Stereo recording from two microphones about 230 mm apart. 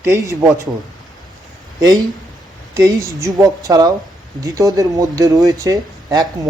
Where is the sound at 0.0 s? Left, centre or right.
Centre.